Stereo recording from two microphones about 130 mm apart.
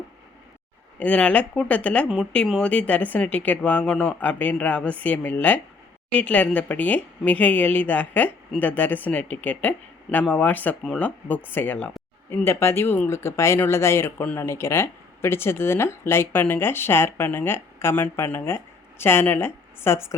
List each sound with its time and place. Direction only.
0.9 s speech: 10° left (ahead or behind)